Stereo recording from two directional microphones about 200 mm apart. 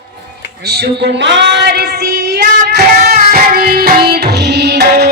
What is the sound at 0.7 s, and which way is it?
Female singing, 55° right (ahead or behind).